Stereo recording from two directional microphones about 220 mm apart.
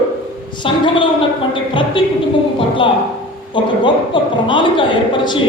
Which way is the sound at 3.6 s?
20° left (ahead or behind).